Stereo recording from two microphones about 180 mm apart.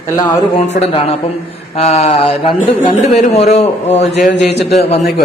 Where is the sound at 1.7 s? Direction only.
35° left (ahead or behind).